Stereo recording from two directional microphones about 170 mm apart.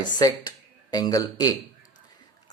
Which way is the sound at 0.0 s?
25° left (ahead or behind).